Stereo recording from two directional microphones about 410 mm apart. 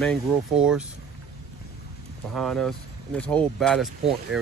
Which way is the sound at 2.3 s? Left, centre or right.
Centre.